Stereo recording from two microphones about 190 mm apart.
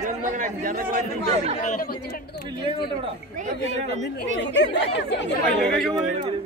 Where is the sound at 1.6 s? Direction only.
40° left (ahead or behind).